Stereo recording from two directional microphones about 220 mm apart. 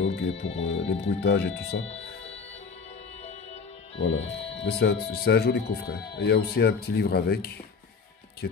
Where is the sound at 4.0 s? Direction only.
55° left (ahead or behind).